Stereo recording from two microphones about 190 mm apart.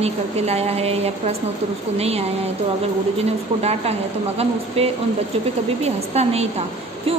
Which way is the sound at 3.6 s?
35° right (ahead or behind).